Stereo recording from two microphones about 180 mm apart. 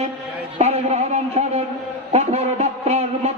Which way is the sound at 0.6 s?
35° right (ahead or behind).